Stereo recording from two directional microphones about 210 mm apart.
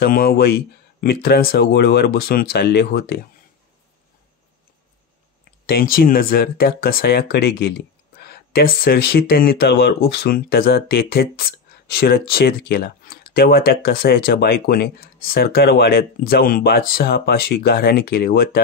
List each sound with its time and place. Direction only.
0.0 s speech: 45° left (ahead or behind)
5.7 s speech: 45° left (ahead or behind)